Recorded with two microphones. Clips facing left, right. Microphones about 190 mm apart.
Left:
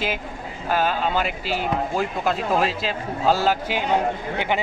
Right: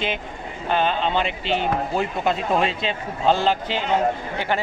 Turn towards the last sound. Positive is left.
turn(degrees=15)  # may be behind; listen again after turning